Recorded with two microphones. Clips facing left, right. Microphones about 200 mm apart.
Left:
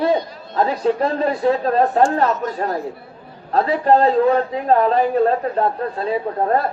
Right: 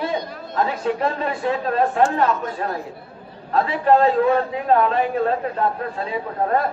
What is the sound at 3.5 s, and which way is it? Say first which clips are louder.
A man's voice: left 2 dB; 35° left (ahead or behind).